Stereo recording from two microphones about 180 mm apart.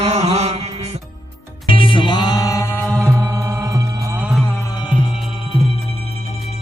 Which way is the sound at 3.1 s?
15° right (ahead or behind).